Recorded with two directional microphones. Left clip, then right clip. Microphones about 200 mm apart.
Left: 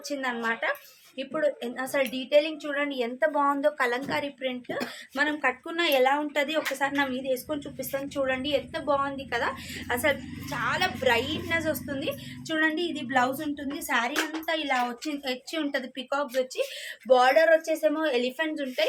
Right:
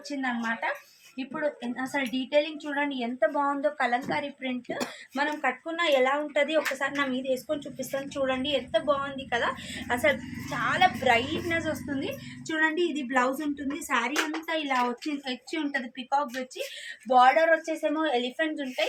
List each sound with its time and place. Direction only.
0.2 s a woman's voice: 50° left (ahead or behind); by 18.9 s 30° left (ahead or behind)